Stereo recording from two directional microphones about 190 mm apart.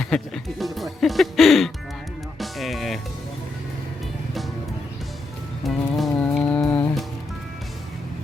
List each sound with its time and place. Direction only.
0.0 s speech: centre (ahead or behind)
2.4 s music: centre (ahead or behind)
5.6 s music: centre (ahead or behind)
6.3 s a sound: 5° left (ahead or behind)
6.6 s music: 10° left (ahead or behind)